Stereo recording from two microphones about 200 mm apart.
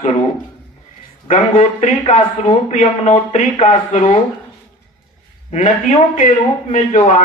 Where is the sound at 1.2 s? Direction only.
40° left (ahead or behind).